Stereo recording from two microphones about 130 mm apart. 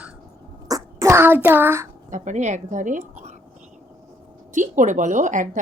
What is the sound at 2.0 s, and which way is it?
Speech, 70° right (ahead or behind).